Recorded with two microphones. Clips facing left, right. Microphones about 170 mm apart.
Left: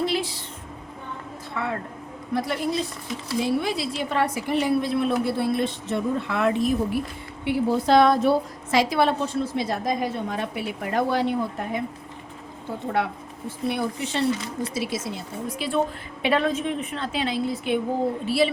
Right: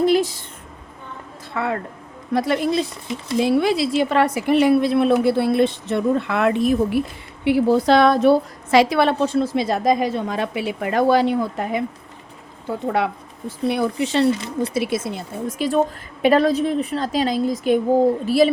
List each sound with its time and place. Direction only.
0.0 s a woman's voice: 45° right (ahead or behind)
2.3 s a woman's voice: 90° right; by 7.0 s 65° right (ahead or behind)
7.4 s a woman's voice: 90° right
13.7 s a woman's voice: 90° right; by 18.5 s 40° right (ahead or behind)